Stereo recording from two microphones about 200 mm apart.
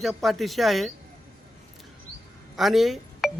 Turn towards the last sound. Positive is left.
turn(degrees=0)  # may be behind; listen again after turning